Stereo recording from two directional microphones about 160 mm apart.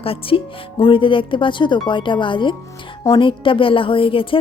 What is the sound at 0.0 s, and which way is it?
A woman's voice, 35° left (ahead or behind).